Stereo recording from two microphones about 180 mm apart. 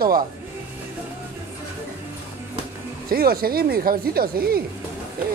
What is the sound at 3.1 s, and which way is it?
Speech, 55° right (ahead or behind).